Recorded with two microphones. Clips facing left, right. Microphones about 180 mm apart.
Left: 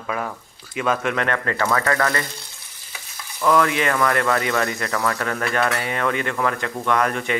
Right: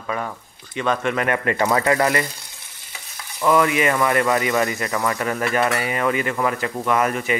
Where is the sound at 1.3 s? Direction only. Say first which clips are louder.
Right 2 dB; 15° right (ahead or behind).